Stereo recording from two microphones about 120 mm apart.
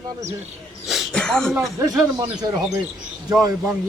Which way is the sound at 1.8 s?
30° right (ahead or behind).